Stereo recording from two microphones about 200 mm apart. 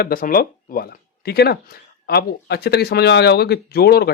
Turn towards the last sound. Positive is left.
turn(degrees=50)  # may be behind; listen again after turning